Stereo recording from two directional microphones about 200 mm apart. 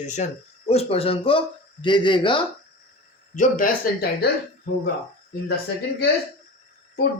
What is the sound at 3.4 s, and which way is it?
Speech, 45° left (ahead or behind).